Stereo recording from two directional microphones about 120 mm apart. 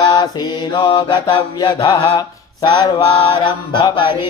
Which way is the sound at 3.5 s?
40° left (ahead or behind).